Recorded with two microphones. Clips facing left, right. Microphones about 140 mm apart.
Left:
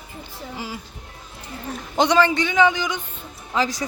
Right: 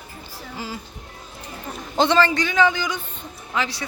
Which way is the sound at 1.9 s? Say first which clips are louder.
Left 1 dB; 15° left (ahead or behind).